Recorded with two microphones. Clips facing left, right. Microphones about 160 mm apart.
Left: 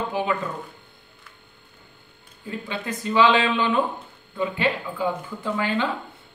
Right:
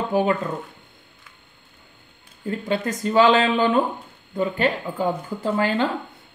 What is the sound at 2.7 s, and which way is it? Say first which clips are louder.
Speech: right 5 dB; 45° right (ahead or behind).